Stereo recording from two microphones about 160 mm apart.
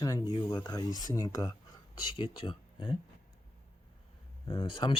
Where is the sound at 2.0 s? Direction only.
30° left (ahead or behind).